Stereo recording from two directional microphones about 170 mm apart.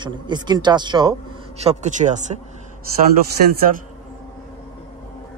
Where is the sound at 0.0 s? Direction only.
25° right (ahead or behind).